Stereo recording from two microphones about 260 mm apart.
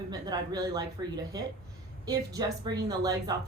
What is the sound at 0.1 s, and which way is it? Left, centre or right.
A woman's voice, centre.